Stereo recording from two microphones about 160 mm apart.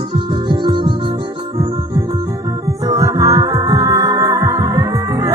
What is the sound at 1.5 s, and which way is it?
Music, 20° right (ahead or behind).